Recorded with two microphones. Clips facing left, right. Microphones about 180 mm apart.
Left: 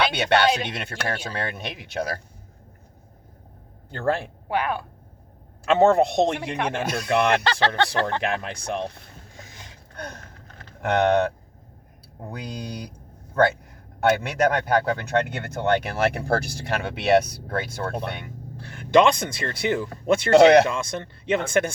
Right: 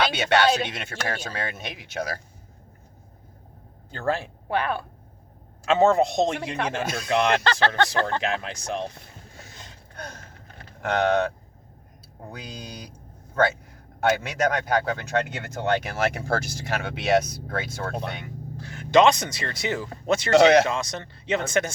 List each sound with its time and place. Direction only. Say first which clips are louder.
0.1 s speech: left 1 dB; 60° left (ahead or behind)
3.9 s speech: left 2 dB; 60° left (ahead or behind)
4.4 s speech: even; 10° left (ahead or behind)
5.6 s speech: left 2 dB; 60° left (ahead or behind)
7.4 s speech: even; 15° left (ahead or behind)
8.2 s speech: left 1 dB; 55° left (ahead or behind)
10.8 s speech: left 2 dB; 60° left (ahead or behind)